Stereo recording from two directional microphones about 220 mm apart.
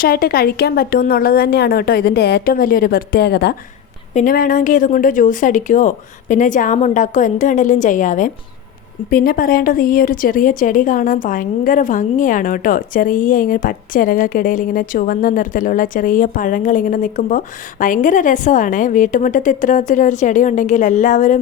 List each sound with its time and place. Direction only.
0.0 s a woman's voice: 40° left (ahead or behind)
4.1 s a woman's voice: 35° left (ahead or behind)